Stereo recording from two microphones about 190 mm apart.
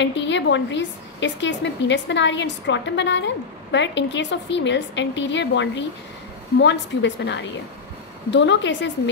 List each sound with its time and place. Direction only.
0.0 s a woman's voice: 70° left (ahead or behind)